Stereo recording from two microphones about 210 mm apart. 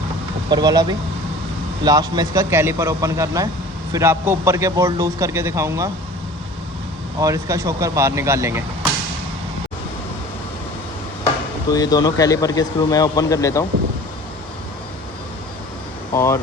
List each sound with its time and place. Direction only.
0.5 s a man's voice: 20° right (ahead or behind)
7.2 s a man's voice: 15° right (ahead or behind)
11.7 s speech: 15° left (ahead or behind)
16.1 s speech: 15° left (ahead or behind)